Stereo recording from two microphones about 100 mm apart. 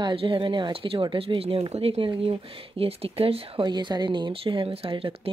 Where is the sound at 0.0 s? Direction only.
60° right (ahead or behind); by 2.0 s 80° right.